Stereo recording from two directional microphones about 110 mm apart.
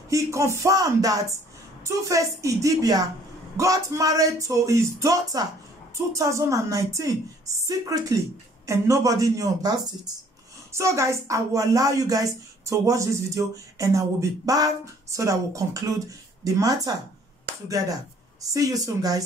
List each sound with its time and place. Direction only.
0.1 s a woman's voice: 25° right (ahead or behind)